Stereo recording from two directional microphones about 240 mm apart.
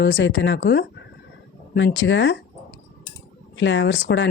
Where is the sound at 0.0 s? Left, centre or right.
Left.